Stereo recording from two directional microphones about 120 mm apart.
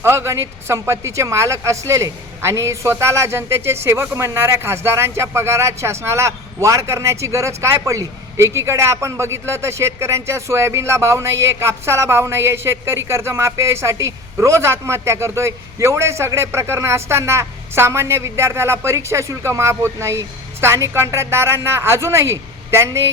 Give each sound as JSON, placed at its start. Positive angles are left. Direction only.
{"t": 0.0, "sound": "speech", "side_deg": -20}